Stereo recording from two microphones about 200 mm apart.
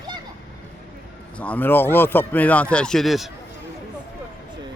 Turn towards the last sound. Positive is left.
turn(degrees=0)  # may be behind; listen again after turning